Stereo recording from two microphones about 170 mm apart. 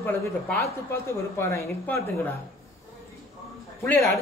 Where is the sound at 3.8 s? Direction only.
10° left (ahead or behind).